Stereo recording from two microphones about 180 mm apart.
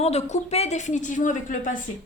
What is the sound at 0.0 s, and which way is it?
A woman's voice, 40° left (ahead or behind).